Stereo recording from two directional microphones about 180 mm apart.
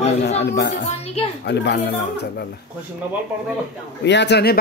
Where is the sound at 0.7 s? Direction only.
35° left (ahead or behind).